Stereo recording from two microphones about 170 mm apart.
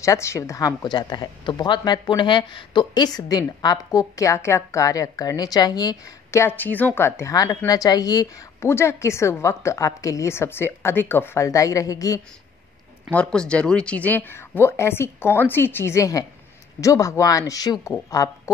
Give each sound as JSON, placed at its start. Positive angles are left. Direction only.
{"t": 0.0, "sound": "a woman's voice", "side_deg": 15}
{"t": 13.1, "sound": "a woman's voice", "side_deg": 5}